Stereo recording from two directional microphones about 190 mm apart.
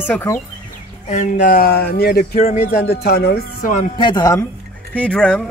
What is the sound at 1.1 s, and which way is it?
Speech, 40° left (ahead or behind).